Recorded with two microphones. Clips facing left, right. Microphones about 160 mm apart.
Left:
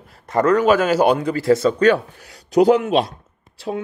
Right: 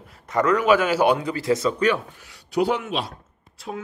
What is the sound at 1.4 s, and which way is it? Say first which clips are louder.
Speech: left 6 dB; 55° left (ahead or behind).